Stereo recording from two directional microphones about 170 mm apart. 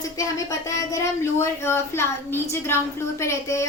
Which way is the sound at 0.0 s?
20° left (ahead or behind).